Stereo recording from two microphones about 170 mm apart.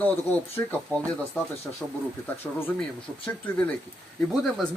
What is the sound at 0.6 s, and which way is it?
Speech, 10° left (ahead or behind).